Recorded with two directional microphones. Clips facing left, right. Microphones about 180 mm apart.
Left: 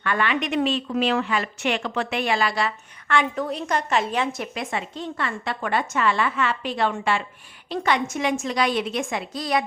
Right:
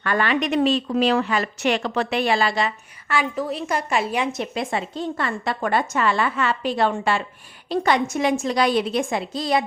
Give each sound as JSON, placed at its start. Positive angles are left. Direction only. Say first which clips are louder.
{"t": 0.0, "sound": "a woman's voice", "louder": "right 3 dB", "side_deg": -40}
{"t": 3.1, "sound": "a woman's voice", "louder": "even", "side_deg": -5}